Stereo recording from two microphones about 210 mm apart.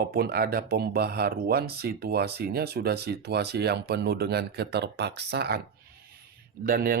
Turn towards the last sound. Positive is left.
turn(degrees=-45)  # may be behind; listen again after turning